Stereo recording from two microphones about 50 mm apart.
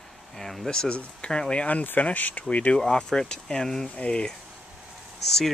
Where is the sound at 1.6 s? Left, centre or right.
Left.